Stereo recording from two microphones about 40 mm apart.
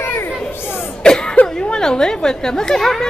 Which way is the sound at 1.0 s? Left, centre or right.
Left.